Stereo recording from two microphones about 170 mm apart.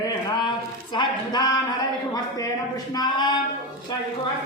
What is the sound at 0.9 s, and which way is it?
Speech, 25° left (ahead or behind).